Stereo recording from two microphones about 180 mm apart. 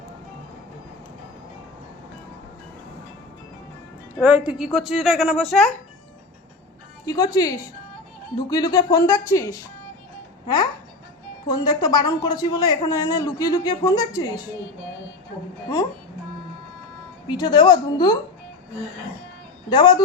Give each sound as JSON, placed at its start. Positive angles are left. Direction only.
{"t": 4.2, "sound": "a woman's voice", "side_deg": -10}
{"t": 7.0, "sound": "a man's voice", "side_deg": 20}
{"t": 17.2, "sound": "a man's voice", "side_deg": 25}
{"t": 19.7, "sound": "a man's voice", "side_deg": 25}